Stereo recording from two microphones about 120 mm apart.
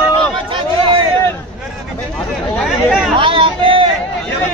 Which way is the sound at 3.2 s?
45° right (ahead or behind).